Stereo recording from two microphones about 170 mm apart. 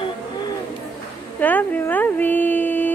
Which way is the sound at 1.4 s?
10° left (ahead or behind).